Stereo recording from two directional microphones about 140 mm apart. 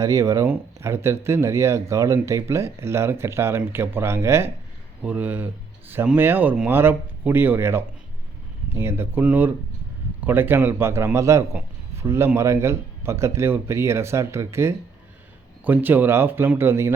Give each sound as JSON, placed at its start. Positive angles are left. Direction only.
{"t": 0.0, "sound": "a man's voice", "side_deg": -25}